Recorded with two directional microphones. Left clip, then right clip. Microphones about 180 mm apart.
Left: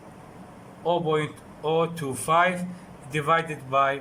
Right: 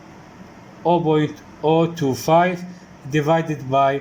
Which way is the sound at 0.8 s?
20° right (ahead or behind).